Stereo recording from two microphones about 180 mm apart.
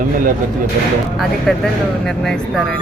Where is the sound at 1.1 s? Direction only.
Centre (ahead or behind).